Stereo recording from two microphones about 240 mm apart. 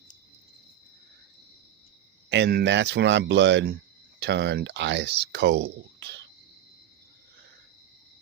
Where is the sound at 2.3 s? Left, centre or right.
Right.